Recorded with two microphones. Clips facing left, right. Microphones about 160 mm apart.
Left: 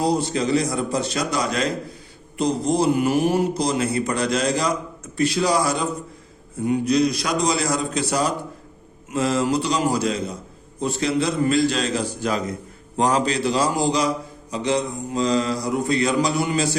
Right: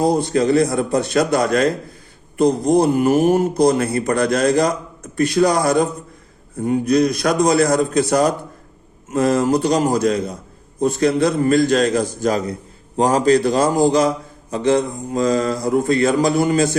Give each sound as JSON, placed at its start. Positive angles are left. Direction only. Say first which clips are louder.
{"t": 0.0, "sound": "a man's voice", "louder": "right 5 dB", "side_deg": -50}